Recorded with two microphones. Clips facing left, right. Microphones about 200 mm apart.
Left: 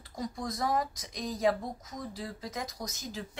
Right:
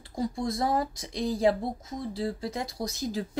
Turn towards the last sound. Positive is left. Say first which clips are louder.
# right 9 dB
turn(degrees=-35)  # may be behind; listen again after turning